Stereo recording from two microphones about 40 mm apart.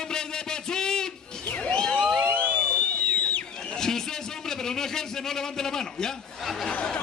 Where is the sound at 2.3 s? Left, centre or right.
Left.